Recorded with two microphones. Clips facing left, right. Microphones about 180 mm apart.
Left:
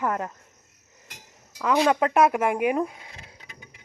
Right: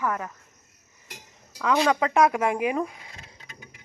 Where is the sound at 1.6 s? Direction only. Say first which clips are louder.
Left 1 dB; 10° left (ahead or behind).